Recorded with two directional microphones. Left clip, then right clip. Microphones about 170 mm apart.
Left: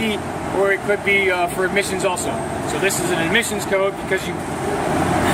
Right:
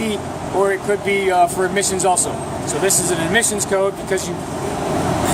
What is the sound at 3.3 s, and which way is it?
Speech, 45° right (ahead or behind).